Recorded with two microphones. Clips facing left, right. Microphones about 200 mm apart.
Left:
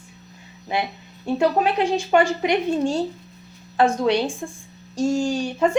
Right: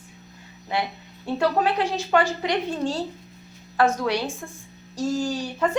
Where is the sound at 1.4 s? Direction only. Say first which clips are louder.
Left 2 dB; 20° left (ahead or behind).